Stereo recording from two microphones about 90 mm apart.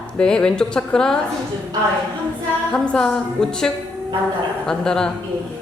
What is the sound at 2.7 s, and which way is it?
Speech, 10° left (ahead or behind).